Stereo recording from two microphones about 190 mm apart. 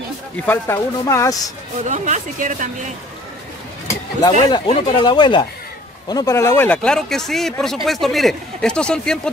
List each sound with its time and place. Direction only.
0.5 s speech: 15° left (ahead or behind)
1.9 s speech: 40° right (ahead or behind)
3.8 s speech: 15° left (ahead or behind)